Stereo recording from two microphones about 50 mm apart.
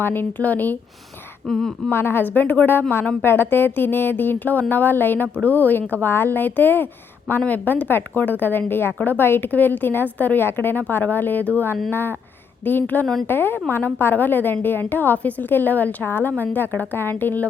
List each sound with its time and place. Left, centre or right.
0.0 s a woman's voice: left
1.5 s speech: centre
1.9 s speech: left
2.2 s a woman's voice: left
16.0 s a woman's voice: left